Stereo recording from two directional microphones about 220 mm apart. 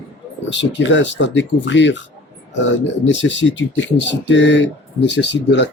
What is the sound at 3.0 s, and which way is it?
Speech, 55° left (ahead or behind).